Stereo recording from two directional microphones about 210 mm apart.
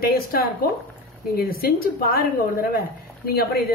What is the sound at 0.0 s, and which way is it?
A woman's voice, 45° left (ahead or behind).